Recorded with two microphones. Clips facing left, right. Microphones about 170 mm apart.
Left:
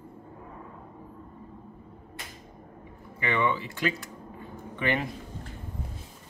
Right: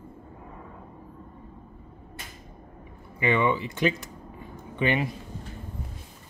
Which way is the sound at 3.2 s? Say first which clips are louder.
Right 4 dB; 15° right (ahead or behind).